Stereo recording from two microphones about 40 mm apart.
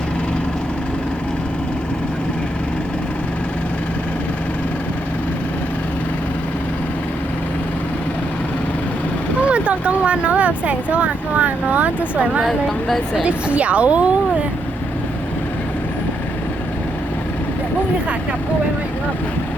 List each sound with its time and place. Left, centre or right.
9.5 s speech: right
12.5 s speech: centre
13.2 s a woman's voice: right